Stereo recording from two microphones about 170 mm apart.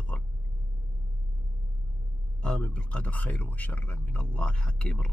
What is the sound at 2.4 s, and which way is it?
A man's voice, 5° left (ahead or behind).